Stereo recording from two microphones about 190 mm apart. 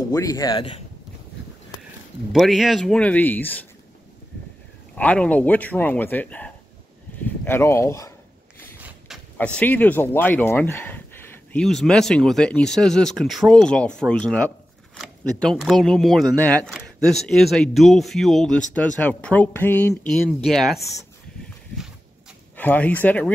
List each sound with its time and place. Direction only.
0.1 s speech: 20° left (ahead or behind)
2.3 s speech: centre (ahead or behind)
4.9 s speech: 5° left (ahead or behind)
9.4 s speech: 10° left (ahead or behind)
22.6 s speech: 10° left (ahead or behind)